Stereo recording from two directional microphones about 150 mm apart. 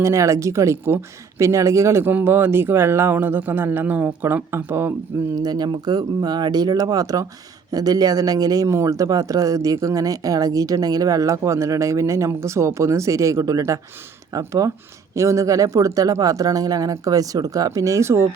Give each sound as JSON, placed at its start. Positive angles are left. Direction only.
{"t": 0.0, "sound": "speech", "side_deg": -20}
{"t": 5.4, "sound": "speech", "side_deg": -25}